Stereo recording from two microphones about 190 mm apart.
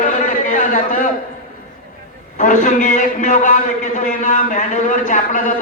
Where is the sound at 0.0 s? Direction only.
45° left (ahead or behind).